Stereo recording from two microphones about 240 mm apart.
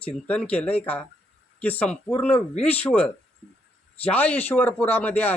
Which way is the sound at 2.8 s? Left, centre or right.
Centre.